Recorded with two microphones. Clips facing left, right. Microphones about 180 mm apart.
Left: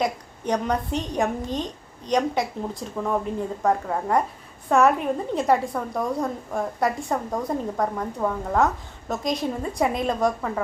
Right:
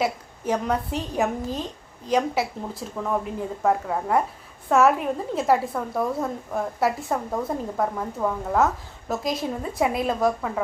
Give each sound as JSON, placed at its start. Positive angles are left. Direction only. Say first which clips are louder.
{"t": 0.0, "sound": "a woman's voice", "louder": "even", "side_deg": -5}